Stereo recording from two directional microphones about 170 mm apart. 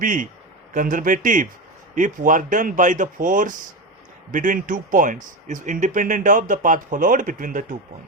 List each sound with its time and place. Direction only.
0.0 s speech: 50° right (ahead or behind)